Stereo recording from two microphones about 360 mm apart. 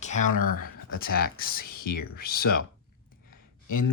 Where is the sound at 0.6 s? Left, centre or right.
Left.